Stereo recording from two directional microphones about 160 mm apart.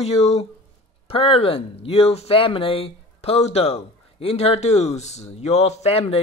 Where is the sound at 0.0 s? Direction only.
40° left (ahead or behind).